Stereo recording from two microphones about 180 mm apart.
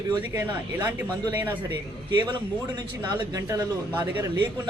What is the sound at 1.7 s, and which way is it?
A man's voice, 25° right (ahead or behind).